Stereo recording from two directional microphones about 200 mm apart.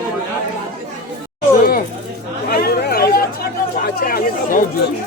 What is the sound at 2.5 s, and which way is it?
Chatter, 50° left (ahead or behind).